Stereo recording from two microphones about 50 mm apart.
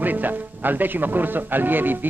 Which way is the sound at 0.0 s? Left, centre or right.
Right.